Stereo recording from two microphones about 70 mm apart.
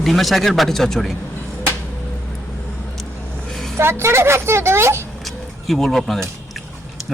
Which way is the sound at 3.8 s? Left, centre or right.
Right.